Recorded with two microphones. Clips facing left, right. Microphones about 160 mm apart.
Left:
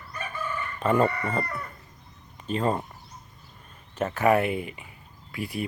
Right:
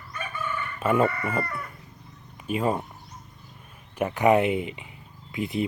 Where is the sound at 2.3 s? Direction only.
10° right (ahead or behind).